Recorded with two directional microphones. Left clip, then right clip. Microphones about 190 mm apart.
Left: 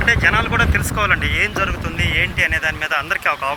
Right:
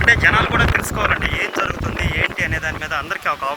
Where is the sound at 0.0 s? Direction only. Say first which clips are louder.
Right 2 dB; 5° right (ahead or behind).